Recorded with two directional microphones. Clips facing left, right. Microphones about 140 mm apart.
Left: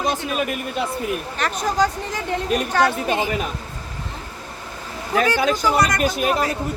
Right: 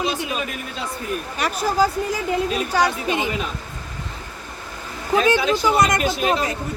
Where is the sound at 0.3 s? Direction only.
60° left (ahead or behind).